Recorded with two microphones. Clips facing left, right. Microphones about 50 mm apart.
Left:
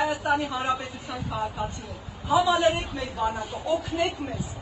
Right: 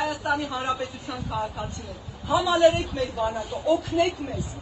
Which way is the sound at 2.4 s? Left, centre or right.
Left.